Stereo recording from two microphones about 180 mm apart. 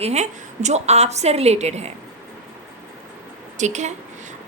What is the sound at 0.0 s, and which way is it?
A woman's voice, 40° right (ahead or behind).